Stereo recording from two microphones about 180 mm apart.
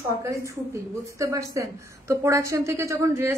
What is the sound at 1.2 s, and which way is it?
A woman's voice, 20° right (ahead or behind).